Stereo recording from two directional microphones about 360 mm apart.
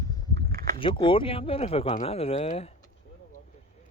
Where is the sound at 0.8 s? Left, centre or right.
Centre.